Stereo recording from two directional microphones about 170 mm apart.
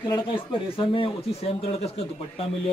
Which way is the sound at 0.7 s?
30° left (ahead or behind).